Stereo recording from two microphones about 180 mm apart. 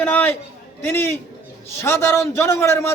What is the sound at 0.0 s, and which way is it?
A man's voice, 10° left (ahead or behind).